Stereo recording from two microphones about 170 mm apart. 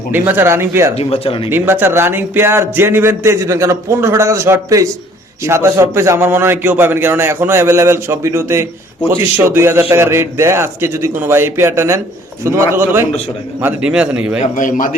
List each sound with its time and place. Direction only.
0.1 s speech: 10° right (ahead or behind)
0.9 s speech: 35° left (ahead or behind)
1.5 s speech: 10° right (ahead or behind)
14.4 s a man's voice: 50° left (ahead or behind)